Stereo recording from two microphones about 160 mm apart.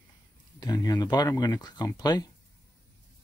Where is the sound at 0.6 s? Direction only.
20° left (ahead or behind).